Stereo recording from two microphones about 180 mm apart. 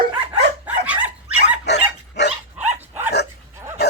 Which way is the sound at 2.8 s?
10° right (ahead or behind).